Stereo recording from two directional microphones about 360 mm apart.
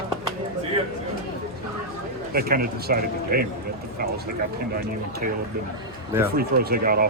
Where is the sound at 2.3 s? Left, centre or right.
Right.